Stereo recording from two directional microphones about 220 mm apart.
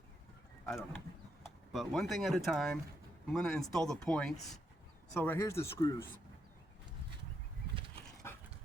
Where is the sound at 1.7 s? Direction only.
Centre (ahead or behind).